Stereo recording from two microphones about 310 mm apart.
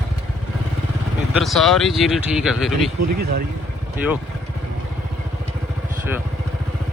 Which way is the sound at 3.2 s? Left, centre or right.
Right.